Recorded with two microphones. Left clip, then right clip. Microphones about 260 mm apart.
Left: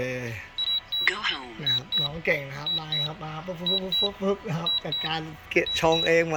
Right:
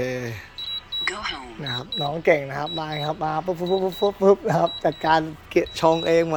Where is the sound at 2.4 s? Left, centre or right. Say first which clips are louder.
Right 3 dB; centre.